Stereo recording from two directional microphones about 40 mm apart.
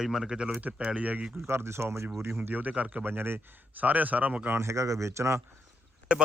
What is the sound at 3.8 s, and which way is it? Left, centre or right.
Speech, right.